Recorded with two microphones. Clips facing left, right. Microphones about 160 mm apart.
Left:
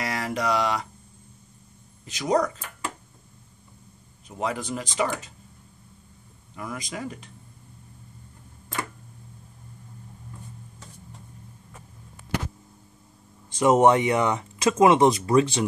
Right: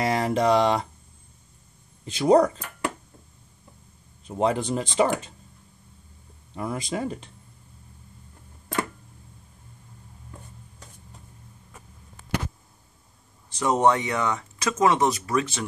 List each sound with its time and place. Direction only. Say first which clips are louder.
0.0 s speech: right 6 dB; 25° right (ahead or behind)
2.0 s speech: right 6 dB; 30° right (ahead or behind)
4.3 s speech: right 5 dB; 30° right (ahead or behind)
6.5 s speech: right 5 dB; 30° right (ahead or behind)
13.5 s speech: left 3 dB; 20° left (ahead or behind)